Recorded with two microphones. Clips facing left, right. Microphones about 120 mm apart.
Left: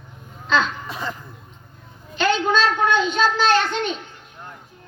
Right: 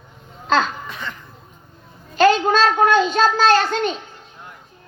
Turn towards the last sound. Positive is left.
turn(degrees=-40)  # may be behind; listen again after turning